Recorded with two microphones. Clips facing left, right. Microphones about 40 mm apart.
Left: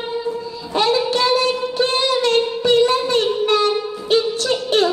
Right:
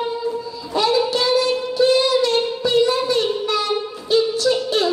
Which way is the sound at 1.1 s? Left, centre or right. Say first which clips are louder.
Left 1 dB; left.